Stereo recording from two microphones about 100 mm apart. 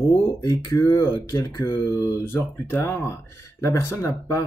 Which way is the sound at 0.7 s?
25° left (ahead or behind).